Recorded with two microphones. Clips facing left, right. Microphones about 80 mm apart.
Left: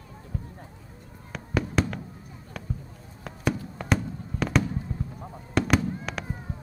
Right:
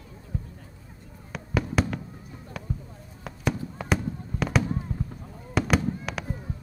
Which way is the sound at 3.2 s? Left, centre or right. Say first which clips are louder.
Left 1 dB; centre.